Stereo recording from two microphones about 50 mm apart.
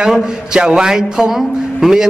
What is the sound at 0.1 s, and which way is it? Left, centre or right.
A man's voice, centre.